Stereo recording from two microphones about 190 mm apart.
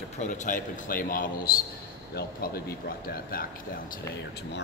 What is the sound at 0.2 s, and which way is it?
A man's voice, 40° left (ahead or behind).